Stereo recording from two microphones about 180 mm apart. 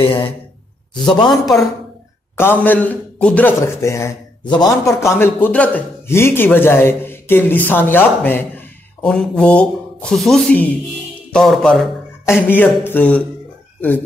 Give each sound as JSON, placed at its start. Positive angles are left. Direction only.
{"t": 0.0, "sound": "speech", "side_deg": 30}
{"t": 2.3, "sound": "a man's voice", "side_deg": 10}
{"t": 12.4, "sound": "a man's voice", "side_deg": 10}